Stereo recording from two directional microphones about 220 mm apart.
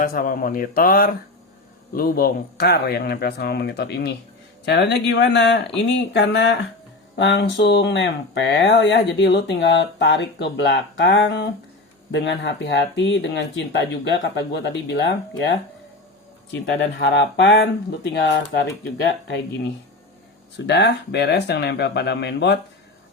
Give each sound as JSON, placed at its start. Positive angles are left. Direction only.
{"t": 0.0, "sound": "speech", "side_deg": 40}
{"t": 20.7, "sound": "speech", "side_deg": 50}